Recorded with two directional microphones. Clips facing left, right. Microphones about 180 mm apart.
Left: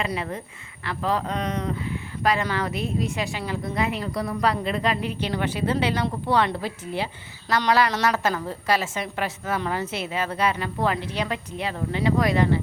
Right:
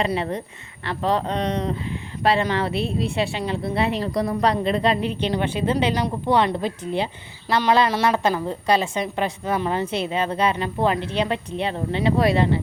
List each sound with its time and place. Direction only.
0.0 s a woman's voice: 35° right (ahead or behind)